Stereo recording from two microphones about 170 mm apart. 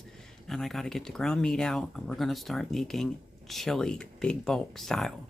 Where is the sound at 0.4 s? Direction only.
Centre (ahead or behind).